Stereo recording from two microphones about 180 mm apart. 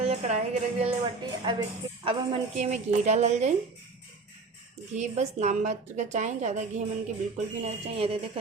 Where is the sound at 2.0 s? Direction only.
30° right (ahead or behind).